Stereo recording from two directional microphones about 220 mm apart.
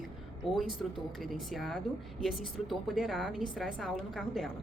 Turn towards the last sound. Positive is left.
turn(degrees=0)  # may be behind; listen again after turning